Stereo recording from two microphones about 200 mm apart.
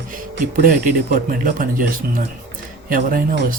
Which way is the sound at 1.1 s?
45° right (ahead or behind).